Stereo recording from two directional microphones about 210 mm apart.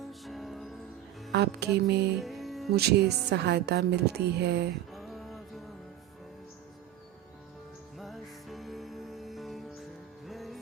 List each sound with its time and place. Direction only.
0.0 s music: centre (ahead or behind)
1.3 s a woman's voice: 50° right (ahead or behind)
2.2 s music: centre (ahead or behind)
2.7 s a woman's voice: 50° right (ahead or behind)
4.9 s a sound: centre (ahead or behind)
7.9 s music: centre (ahead or behind)